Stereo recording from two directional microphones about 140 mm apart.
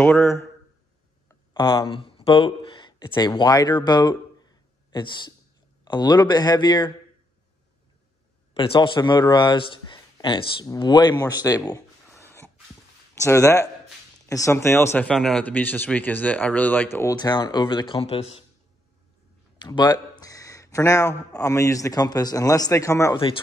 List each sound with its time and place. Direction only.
0.0 s speech: 15° left (ahead or behind)
1.3 s speech: 30° left (ahead or behind)
8.5 s speech: 35° left (ahead or behind)
11.4 s a sound: 25° left (ahead or behind)
13.1 s speech: 20° left (ahead or behind)
15.0 s a man's voice: 5° left (ahead or behind)
17.1 s speech: 30° left (ahead or behind)
19.6 s a man's voice: 30° left (ahead or behind)